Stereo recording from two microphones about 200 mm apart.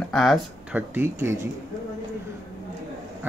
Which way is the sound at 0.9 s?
10° right (ahead or behind).